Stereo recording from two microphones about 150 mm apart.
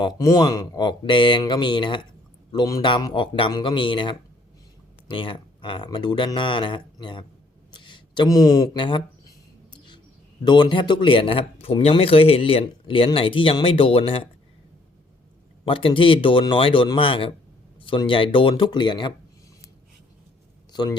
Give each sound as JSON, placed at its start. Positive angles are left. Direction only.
{"t": 0.0, "sound": "a man's voice", "side_deg": 25}
{"t": 9.7, "sound": "a sound", "side_deg": 30}
{"t": 10.4, "sound": "speech", "side_deg": 30}
{"t": 15.6, "sound": "speech", "side_deg": 35}